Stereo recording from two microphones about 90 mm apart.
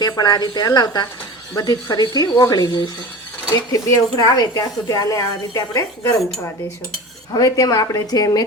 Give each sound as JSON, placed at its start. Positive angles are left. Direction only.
{"t": 0.0, "sound": "speech", "side_deg": 50}
{"t": 7.3, "sound": "speech", "side_deg": 45}